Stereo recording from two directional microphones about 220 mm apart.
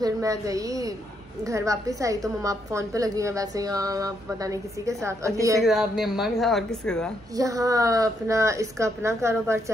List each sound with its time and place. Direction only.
0.0 s a woman's voice: 15° right (ahead or behind)
5.6 s speech: centre (ahead or behind)
7.3 s a woman's voice: 15° right (ahead or behind)